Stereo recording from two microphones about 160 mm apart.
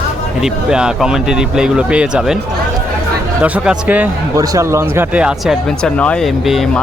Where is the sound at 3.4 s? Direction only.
5° right (ahead or behind).